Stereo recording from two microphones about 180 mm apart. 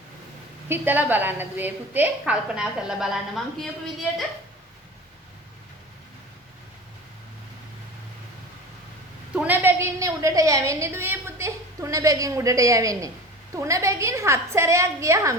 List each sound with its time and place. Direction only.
0.7 s a woman's voice: 10° right (ahead or behind)
9.3 s a sound: 10° right (ahead or behind)
13.7 s a woman's voice: 15° right (ahead or behind)